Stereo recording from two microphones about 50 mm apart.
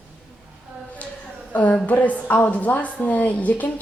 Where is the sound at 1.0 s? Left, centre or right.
Left.